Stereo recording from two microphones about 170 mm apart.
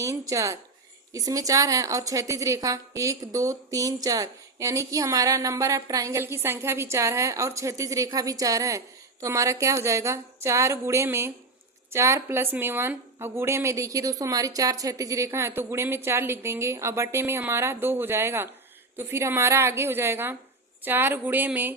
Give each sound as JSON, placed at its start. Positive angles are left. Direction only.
{"t": 0.0, "sound": "a woman's voice", "side_deg": -20}